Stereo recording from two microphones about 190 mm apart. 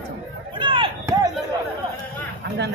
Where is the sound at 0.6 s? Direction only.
25° right (ahead or behind).